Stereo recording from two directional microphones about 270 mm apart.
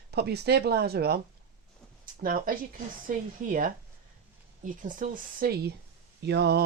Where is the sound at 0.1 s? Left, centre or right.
Right.